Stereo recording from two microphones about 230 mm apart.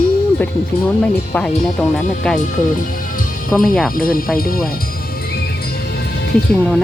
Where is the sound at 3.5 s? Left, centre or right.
Centre.